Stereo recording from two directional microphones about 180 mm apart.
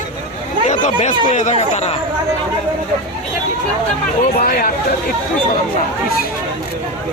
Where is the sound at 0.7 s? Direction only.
40° left (ahead or behind).